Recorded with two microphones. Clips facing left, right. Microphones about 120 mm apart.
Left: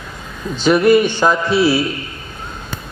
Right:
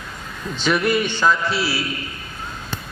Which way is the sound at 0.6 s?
40° left (ahead or behind).